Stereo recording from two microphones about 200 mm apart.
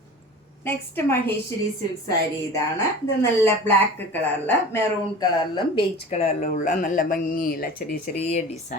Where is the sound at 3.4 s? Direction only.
10° left (ahead or behind).